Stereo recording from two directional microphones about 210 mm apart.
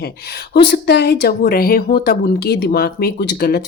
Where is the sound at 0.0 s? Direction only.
50° left (ahead or behind).